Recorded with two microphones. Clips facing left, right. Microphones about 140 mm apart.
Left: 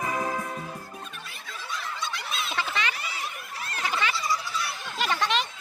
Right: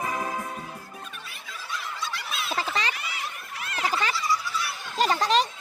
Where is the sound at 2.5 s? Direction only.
35° right (ahead or behind).